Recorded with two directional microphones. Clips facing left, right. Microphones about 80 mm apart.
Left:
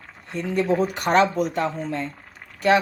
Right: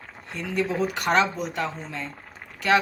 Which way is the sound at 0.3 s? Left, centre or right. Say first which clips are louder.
Left 4 dB; left.